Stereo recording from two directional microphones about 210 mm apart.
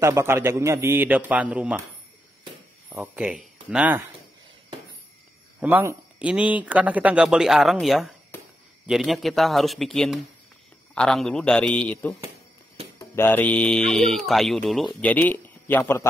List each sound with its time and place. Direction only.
0.0 s speech: 10° right (ahead or behind)
2.9 s speech: 5° right (ahead or behind)
5.6 s a man's voice: 10° right (ahead or behind); by 16.1 s 10° left (ahead or behind)